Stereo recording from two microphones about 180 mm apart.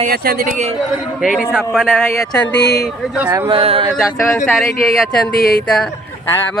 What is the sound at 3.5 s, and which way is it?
Speech, 30° right (ahead or behind).